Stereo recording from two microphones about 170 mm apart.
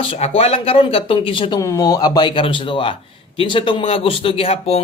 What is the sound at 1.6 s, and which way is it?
Speech, 20° left (ahead or behind).